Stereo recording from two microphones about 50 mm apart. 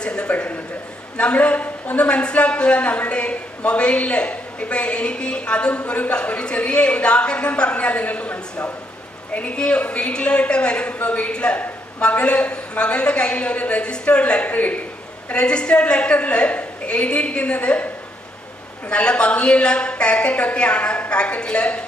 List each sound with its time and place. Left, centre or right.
0.0 s a woman's voice: left
15.2 s a woman's voice: left
18.9 s a woman's voice: left